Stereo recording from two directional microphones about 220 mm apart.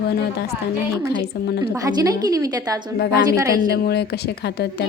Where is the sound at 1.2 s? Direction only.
45° left (ahead or behind).